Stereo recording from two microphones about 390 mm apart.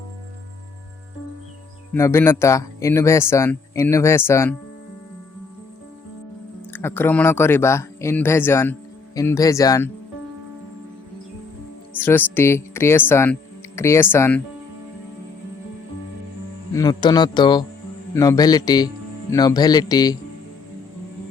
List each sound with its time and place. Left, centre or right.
1.9 s speech: centre
6.7 s speech: centre
12.0 s speech: centre
16.7 s speech: centre